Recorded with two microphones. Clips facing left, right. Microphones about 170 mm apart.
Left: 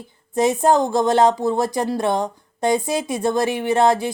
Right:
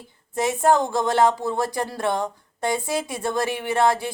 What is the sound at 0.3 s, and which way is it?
A woman's voice, 20° left (ahead or behind).